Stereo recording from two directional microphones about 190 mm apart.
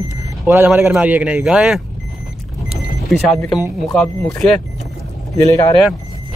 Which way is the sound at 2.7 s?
Centre (ahead or behind).